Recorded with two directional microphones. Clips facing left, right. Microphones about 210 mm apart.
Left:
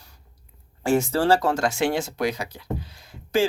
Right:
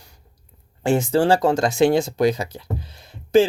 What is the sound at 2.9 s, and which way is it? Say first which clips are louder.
Music: right 10 dB; 20° right (ahead or behind).